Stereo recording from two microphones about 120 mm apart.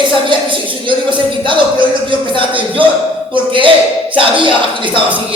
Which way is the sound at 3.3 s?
45° right (ahead or behind).